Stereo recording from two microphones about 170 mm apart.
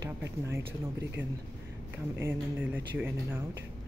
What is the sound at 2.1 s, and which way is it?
Speech, 10° right (ahead or behind).